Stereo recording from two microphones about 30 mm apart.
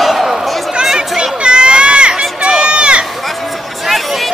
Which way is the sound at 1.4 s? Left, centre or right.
Right.